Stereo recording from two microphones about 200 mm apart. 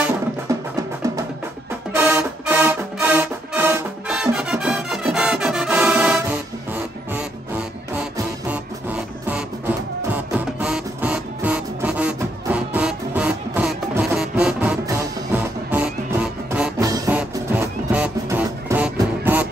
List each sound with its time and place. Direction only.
0.5 s music: 15° right (ahead or behind)
2.0 s music: 10° right (ahead or behind)
16.8 s music: 15° right (ahead or behind)